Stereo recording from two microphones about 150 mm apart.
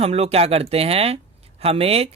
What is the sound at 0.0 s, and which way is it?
Speech, 40° right (ahead or behind).